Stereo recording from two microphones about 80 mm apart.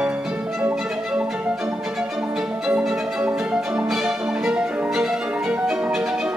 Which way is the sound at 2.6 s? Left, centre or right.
Centre.